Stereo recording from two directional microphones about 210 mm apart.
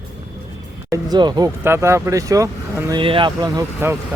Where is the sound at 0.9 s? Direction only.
20° right (ahead or behind).